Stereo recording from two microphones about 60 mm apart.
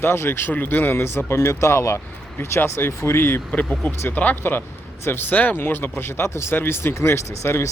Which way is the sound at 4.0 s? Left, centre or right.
Left.